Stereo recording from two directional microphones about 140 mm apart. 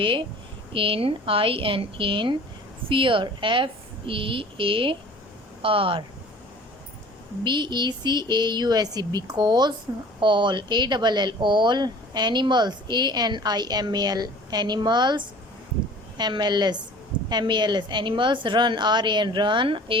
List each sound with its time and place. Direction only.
0.0 s speech: 40° right (ahead or behind)
7.4 s speech: 35° right (ahead or behind)